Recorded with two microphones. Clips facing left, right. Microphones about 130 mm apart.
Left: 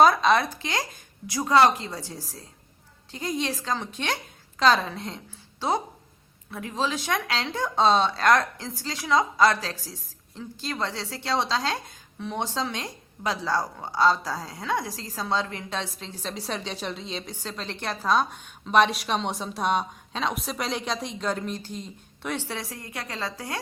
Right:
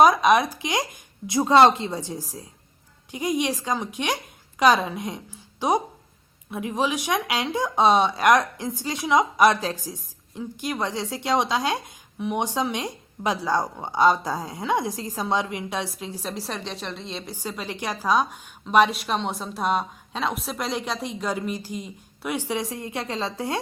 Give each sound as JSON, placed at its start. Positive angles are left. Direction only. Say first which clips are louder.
{"t": 0.0, "sound": "a woman's voice", "louder": "right 2 dB", "side_deg": -15}
{"t": 17.3, "sound": "a woman's voice", "louder": "right 3 dB", "side_deg": -10}